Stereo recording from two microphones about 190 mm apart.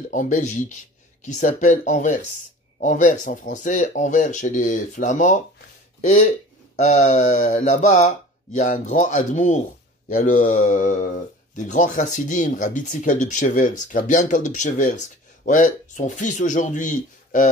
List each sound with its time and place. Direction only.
0.1 s speech: 40° left (ahead or behind)